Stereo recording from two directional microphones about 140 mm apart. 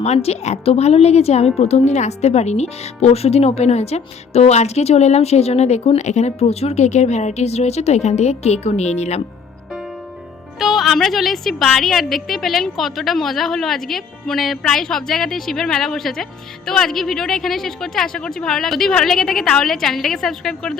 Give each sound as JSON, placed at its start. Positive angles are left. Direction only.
{"t": 0.0, "sound": "a woman's voice", "side_deg": 50}
{"t": 10.6, "sound": "a woman's voice", "side_deg": 0}